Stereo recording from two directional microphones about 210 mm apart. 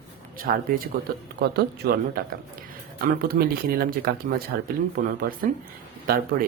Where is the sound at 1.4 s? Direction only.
50° right (ahead or behind).